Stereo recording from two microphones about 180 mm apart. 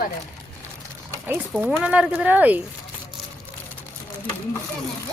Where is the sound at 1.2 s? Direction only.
10° right (ahead or behind).